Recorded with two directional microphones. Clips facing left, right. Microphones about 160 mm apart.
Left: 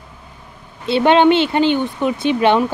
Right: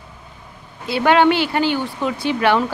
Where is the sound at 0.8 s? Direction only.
25° left (ahead or behind).